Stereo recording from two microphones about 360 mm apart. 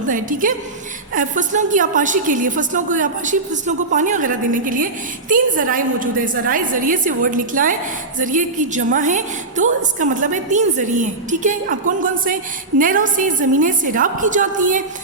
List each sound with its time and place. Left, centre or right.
0.1 s a woman's voice: right